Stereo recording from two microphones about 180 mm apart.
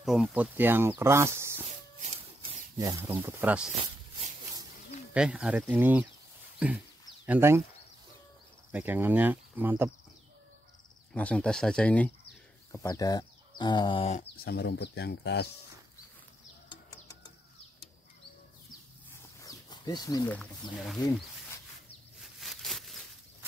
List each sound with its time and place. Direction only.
0.0 s speech: centre (ahead or behind)
2.8 s speech: 15° right (ahead or behind)
5.1 s speech: 5° right (ahead or behind)
8.7 s speech: 10° right (ahead or behind)
11.1 s speech: 5° left (ahead or behind)
12.7 s speech: 20° left (ahead or behind)
14.4 s speech: 65° left (ahead or behind)
16.6 s bird: 25° left (ahead or behind)
19.4 s a sound: 20° left (ahead or behind)
20.7 s speech: centre (ahead or behind)
22.2 s a sound: centre (ahead or behind)